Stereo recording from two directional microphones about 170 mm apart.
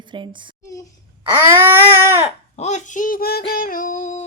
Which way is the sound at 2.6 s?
45° left (ahead or behind).